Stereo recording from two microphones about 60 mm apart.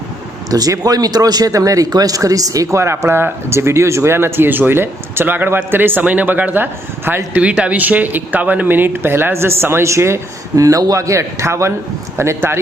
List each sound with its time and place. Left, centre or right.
0.5 s speech: right
7.3 s speech: right
10.5 s a man's voice: right